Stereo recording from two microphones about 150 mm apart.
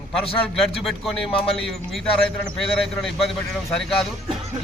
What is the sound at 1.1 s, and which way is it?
Speech, 40° left (ahead or behind).